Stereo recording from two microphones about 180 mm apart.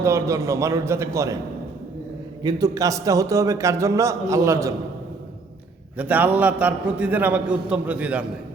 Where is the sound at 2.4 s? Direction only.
20° right (ahead or behind).